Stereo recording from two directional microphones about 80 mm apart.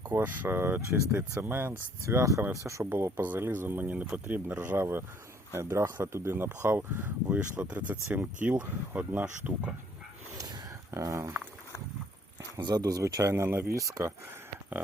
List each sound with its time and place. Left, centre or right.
0.0 s speech: right
2.9 s speech: right
10.3 s a sound: right
12.6 s speech: right